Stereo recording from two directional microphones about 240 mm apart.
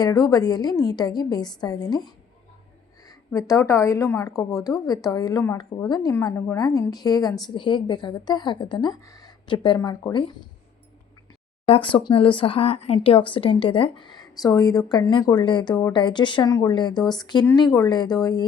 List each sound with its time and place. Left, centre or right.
0.0 s a woman's voice: centre
3.1 s a woman's voice: centre
11.6 s speech: left